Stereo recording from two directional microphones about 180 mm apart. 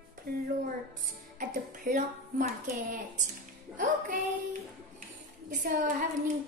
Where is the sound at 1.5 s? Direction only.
45° right (ahead or behind).